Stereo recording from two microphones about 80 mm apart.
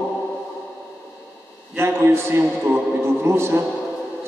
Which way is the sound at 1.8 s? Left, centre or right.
Right.